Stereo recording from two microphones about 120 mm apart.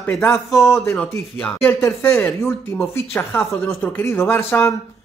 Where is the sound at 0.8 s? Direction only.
5° left (ahead or behind).